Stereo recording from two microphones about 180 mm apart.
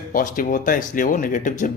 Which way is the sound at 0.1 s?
50° left (ahead or behind).